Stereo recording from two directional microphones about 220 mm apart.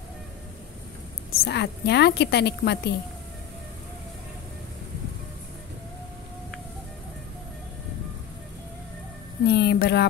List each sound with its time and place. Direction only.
1.4 s a woman's voice: 50° left (ahead or behind)
9.5 s a woman's voice: 50° left (ahead or behind)